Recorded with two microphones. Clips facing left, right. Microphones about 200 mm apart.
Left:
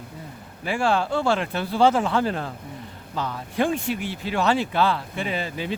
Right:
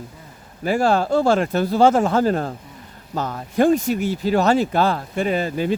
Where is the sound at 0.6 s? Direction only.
40° right (ahead or behind).